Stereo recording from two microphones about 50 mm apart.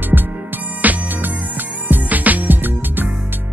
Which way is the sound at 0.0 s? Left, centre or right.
Right.